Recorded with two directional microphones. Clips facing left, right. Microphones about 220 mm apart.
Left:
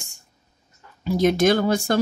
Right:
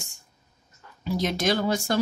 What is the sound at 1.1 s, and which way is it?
Speech, 50° left (ahead or behind).